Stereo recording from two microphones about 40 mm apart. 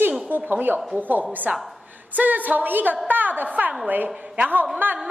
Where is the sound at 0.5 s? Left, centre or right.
Right.